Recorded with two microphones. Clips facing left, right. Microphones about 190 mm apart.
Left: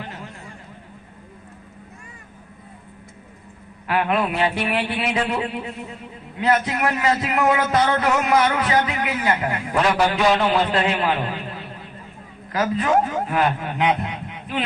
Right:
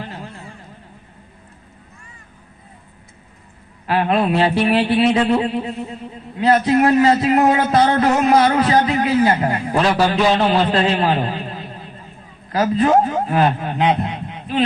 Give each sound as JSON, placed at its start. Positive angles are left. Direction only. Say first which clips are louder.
{"t": 3.8, "sound": "a man's voice", "louder": "right 4 dB", "side_deg": -35}